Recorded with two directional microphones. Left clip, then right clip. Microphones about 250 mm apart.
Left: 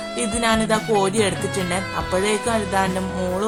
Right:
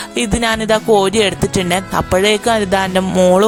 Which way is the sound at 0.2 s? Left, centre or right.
Right.